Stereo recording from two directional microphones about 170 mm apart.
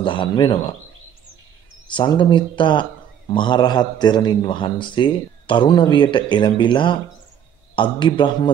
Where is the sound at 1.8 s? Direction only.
30° left (ahead or behind).